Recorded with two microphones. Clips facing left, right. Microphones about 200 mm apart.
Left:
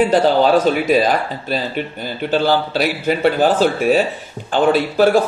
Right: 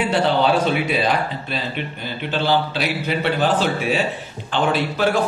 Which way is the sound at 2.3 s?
45° left (ahead or behind).